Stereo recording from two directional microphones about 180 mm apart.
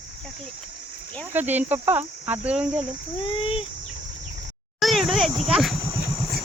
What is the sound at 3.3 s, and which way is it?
Speech, 30° left (ahead or behind).